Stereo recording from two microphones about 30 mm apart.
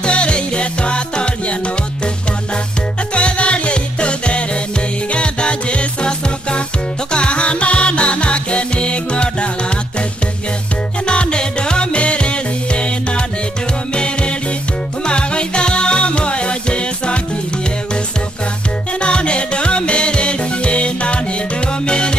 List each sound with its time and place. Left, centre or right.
0.0 s music: left
3.2 s music: left
11.1 s music: left
18.9 s music: left